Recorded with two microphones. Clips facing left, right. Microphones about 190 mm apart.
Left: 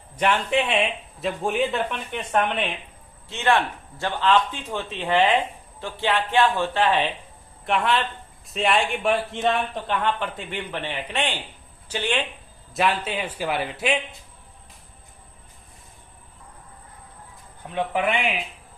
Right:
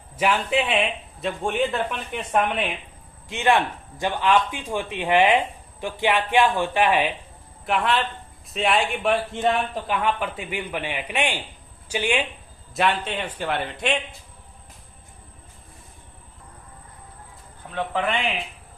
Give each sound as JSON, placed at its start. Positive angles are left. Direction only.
{"t": 0.2, "sound": "speech", "side_deg": -5}
{"t": 3.2, "sound": "a man's voice", "side_deg": -15}
{"t": 7.6, "sound": "a man's voice", "side_deg": 0}
{"t": 12.7, "sound": "speech", "side_deg": 0}
{"t": 17.7, "sound": "a man's voice", "side_deg": 10}